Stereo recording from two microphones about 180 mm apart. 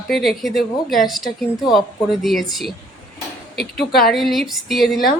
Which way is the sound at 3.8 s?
Centre (ahead or behind).